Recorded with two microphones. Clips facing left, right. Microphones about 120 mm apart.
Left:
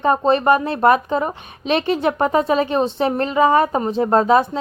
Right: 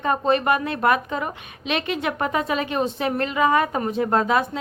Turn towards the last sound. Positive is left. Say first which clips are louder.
# left 5 dB
turn(degrees=30)  # may be behind; listen again after turning